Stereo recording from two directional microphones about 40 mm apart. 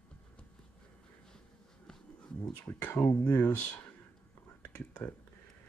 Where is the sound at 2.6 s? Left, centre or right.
Left.